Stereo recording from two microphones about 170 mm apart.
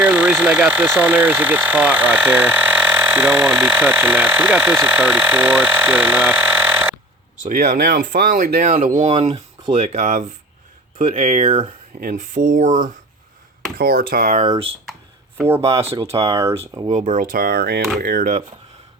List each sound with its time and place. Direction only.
0.0 s speech: 5° right (ahead or behind)
7.4 s speech: 50° right (ahead or behind)
7.7 s speech: 60° right (ahead or behind)
11.3 s speech: 30° right (ahead or behind)
11.9 s speech: 55° right (ahead or behind)
13.7 s speech: 60° right (ahead or behind)
15.4 s speech: 15° right (ahead or behind)
15.8 s speech: 35° right (ahead or behind)
16.1 s speech: 20° right (ahead or behind)
16.9 s speech: 45° right (ahead or behind); by 17.8 s 70° right (ahead or behind)
18.0 s speech: 55° right (ahead or behind)